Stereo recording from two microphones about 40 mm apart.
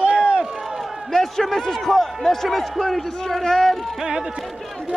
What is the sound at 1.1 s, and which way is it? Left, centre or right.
A man's voice, centre.